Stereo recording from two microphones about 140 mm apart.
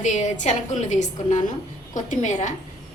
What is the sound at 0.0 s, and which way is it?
A woman's voice, 60° left (ahead or behind).